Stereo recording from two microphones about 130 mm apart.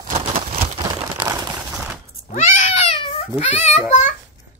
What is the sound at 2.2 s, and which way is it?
Cat, 70° left (ahead or behind).